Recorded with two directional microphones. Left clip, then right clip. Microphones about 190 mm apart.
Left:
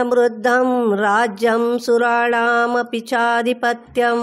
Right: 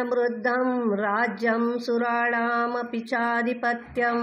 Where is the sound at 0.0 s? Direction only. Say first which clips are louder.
Left 9 dB; 50° left (ahead or behind).